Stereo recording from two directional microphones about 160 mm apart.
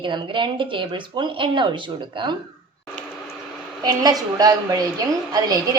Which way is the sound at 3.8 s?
25° right (ahead or behind).